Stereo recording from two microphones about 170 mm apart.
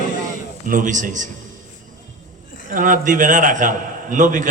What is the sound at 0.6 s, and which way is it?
Speech, 50° right (ahead or behind).